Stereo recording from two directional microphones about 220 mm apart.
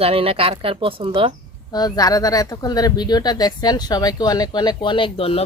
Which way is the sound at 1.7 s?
15° left (ahead or behind).